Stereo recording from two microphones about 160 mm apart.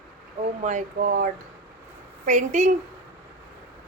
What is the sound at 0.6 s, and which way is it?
Speech, 50° right (ahead or behind).